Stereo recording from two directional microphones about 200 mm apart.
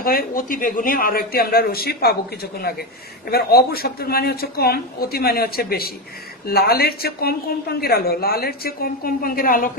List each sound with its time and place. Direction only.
0.0 s a woman's voice: 45° left (ahead or behind)
3.3 s a woman's voice: 50° left (ahead or behind)